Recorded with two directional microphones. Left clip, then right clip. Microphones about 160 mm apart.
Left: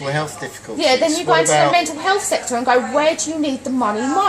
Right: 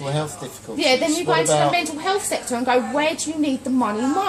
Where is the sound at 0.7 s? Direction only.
25° right (ahead or behind).